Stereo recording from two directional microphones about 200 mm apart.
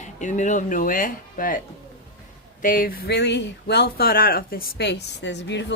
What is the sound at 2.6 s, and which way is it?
Speech, 45° left (ahead or behind).